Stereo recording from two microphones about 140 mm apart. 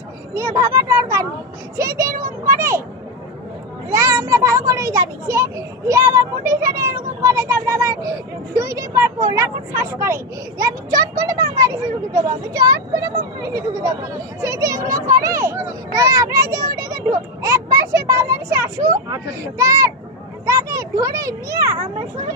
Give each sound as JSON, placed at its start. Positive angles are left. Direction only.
{"t": 0.3, "sound": "a child's voice", "side_deg": -20}
{"t": 2.4, "sound": "children playing", "side_deg": -20}
{"t": 3.9, "sound": "a child's voice", "side_deg": -20}